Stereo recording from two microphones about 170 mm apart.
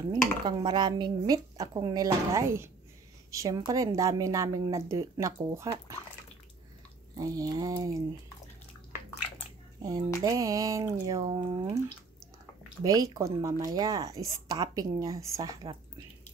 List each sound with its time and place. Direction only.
0.5 s speech: 25° right (ahead or behind)
7.2 s speech: 20° right (ahead or behind)
9.8 s speech: 25° right (ahead or behind)
12.8 s speech: 20° right (ahead or behind)